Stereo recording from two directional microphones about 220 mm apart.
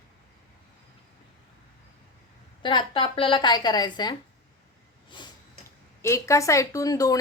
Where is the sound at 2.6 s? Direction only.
20° left (ahead or behind).